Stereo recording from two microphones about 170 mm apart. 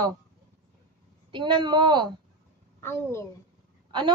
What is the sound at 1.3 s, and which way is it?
Speech, 30° right (ahead or behind).